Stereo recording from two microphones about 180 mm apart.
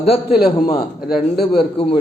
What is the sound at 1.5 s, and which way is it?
Speech, 30° left (ahead or behind).